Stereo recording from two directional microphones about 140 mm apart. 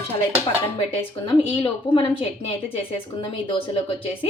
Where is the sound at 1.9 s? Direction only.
40° left (ahead or behind).